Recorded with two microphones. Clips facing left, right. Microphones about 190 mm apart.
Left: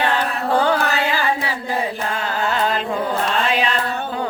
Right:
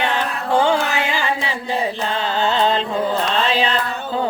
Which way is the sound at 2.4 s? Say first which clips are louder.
Right 3 dB; 30° right (ahead or behind).